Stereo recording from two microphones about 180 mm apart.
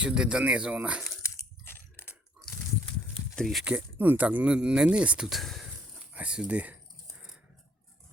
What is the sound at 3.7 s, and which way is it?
Speech, 10° right (ahead or behind).